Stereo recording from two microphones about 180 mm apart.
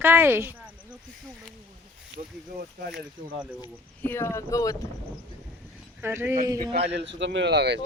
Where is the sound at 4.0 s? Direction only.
15° left (ahead or behind).